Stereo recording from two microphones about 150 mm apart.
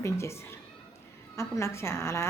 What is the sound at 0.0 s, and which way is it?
Speech, 20° left (ahead or behind).